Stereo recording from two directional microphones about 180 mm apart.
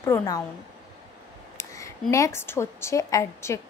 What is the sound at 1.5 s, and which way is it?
Speech, 15° left (ahead or behind).